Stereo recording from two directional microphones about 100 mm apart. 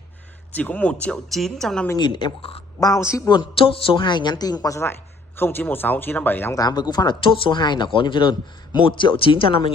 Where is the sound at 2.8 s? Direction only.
30° left (ahead or behind).